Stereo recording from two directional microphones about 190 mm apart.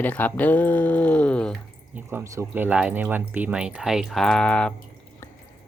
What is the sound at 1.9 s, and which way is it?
Speech, 15° right (ahead or behind).